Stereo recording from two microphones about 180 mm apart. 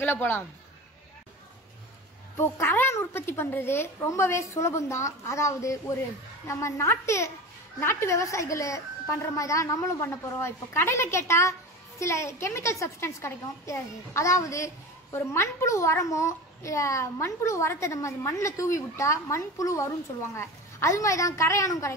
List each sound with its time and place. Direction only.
0.0 s a child's voice: 10° left (ahead or behind)
2.3 s a child's voice: 15° left (ahead or behind)